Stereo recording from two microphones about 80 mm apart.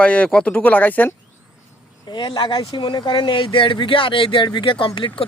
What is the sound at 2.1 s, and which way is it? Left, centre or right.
Speech, left.